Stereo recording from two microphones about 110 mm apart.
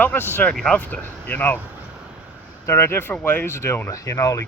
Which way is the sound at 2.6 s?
25° left (ahead or behind).